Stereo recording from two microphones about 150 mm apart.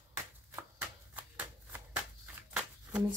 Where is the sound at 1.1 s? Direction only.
10° right (ahead or behind).